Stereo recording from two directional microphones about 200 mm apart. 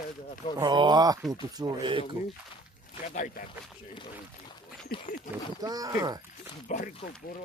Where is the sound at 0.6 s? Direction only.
20° right (ahead or behind).